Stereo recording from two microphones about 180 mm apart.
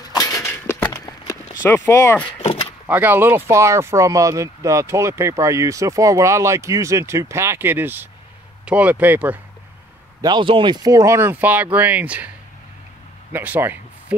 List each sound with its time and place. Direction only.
0.1 s a sound: 20° left (ahead or behind)
0.8 s clip-clop: 20° left (ahead or behind)
1.7 s speech: 15° left (ahead or behind)
2.4 s door: 30° left (ahead or behind)
2.9 s speech: 10° right (ahead or behind)
10.2 s speech: 25° right (ahead or behind); by 12.3 s 10° right (ahead or behind)
13.3 s speech: 10° right (ahead or behind)